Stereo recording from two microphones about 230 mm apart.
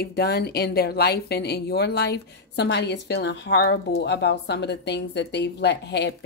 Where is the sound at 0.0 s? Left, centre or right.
Left.